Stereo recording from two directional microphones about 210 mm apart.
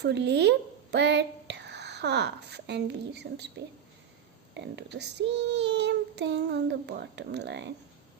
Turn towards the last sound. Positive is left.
turn(degrees=-55)  # may be behind; listen again after turning